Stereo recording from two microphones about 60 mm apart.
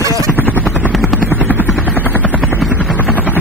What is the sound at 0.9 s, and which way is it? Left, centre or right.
Helicopter, centre.